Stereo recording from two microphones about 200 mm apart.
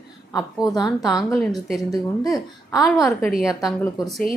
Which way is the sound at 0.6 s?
20° left (ahead or behind).